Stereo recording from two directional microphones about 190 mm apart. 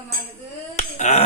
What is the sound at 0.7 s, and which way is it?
Finger snapping, 35° left (ahead or behind).